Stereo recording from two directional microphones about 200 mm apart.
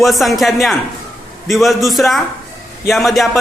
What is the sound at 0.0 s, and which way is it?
Speech, centre (ahead or behind).